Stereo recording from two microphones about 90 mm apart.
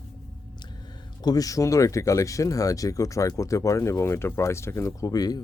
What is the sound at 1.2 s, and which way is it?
Speech, 45° left (ahead or behind).